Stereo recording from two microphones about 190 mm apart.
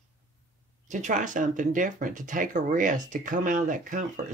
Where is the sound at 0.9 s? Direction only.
40° right (ahead or behind).